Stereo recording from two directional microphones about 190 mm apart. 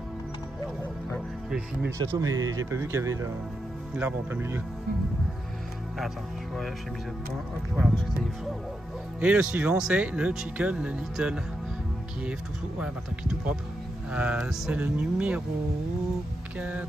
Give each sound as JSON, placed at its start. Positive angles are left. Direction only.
{"t": 2.1, "sound": "speech", "side_deg": -20}
{"t": 5.9, "sound": "speech", "side_deg": 0}
{"t": 9.2, "sound": "speech", "side_deg": -5}
{"t": 12.8, "sound": "speech", "side_deg": -5}
{"t": 16.5, "sound": "speech", "side_deg": -10}